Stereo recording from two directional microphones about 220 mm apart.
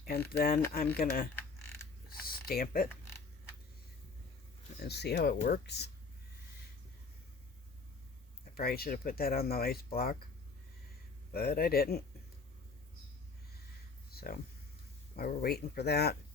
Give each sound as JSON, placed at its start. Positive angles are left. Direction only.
{"t": 0.0, "sound": "speech", "side_deg": 45}
{"t": 2.0, "sound": "a sound", "side_deg": 40}
{"t": 3.0, "sound": "creak", "side_deg": 10}
{"t": 4.8, "sound": "speech", "side_deg": 50}
{"t": 8.5, "sound": "speech", "side_deg": 45}
{"t": 11.3, "sound": "speech", "side_deg": 45}
{"t": 14.1, "sound": "speech", "side_deg": 45}